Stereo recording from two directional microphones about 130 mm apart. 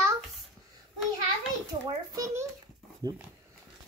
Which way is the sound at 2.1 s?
25° right (ahead or behind).